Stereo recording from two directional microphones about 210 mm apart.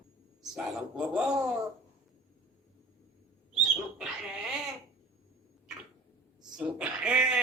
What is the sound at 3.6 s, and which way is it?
Dog, centre (ahead or behind).